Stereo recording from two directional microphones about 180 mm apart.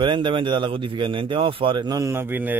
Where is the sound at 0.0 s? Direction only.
25° right (ahead or behind).